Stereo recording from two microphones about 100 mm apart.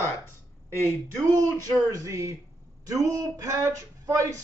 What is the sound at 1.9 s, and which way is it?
Speech, 35° right (ahead or behind).